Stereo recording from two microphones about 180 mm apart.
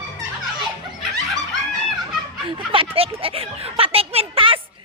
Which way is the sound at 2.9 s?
30° right (ahead or behind).